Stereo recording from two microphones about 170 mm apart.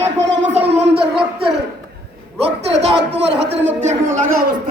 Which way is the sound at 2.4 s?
35° right (ahead or behind).